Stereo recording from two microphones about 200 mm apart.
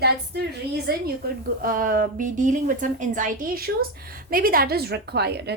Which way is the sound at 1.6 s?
45° right (ahead or behind).